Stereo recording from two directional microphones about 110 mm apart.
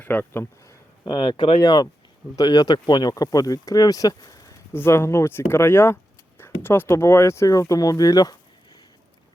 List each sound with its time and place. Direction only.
0.0 s speech: 20° left (ahead or behind)
1.0 s speech: 45° left (ahead or behind)
4.7 s speech: 20° left (ahead or behind); by 8.8 s 35° left (ahead or behind)